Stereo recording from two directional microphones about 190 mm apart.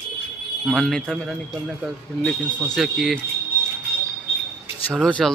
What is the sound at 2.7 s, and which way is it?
Speech, centre (ahead or behind).